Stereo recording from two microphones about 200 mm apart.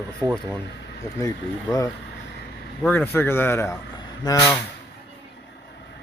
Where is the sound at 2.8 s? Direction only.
10° left (ahead or behind).